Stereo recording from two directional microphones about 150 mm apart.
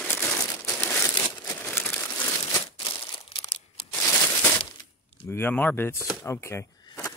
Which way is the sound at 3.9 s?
10° left (ahead or behind).